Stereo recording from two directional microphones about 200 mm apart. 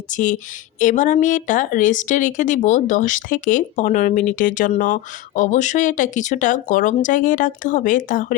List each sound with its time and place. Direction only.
0.1 s a woman's voice: 40° left (ahead or behind)